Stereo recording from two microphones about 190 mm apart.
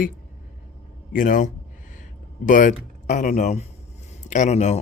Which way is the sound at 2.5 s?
45° left (ahead or behind).